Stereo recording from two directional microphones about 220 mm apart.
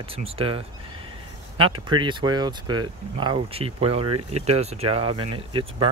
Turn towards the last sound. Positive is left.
turn(degrees=-25)  # may be behind; listen again after turning